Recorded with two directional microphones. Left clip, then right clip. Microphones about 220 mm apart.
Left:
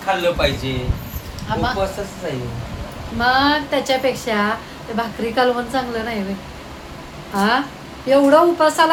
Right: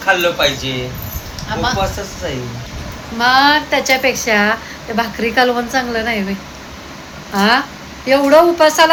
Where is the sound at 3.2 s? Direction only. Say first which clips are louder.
Right 5 dB; 5° left (ahead or behind).